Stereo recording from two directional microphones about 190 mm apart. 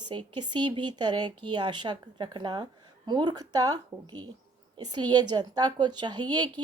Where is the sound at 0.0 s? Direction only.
25° right (ahead or behind).